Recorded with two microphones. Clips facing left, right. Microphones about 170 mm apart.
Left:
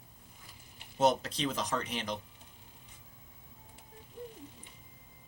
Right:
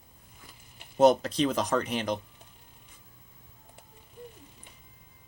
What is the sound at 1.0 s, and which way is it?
Speech, 45° right (ahead or behind).